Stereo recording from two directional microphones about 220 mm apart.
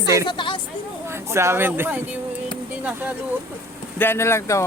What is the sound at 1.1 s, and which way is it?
Speech, 10° right (ahead or behind).